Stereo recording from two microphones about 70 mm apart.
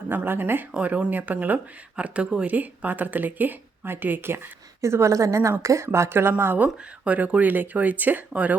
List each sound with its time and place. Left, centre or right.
0.1 s speech: right
0.7 s speech: centre
4.8 s speech: right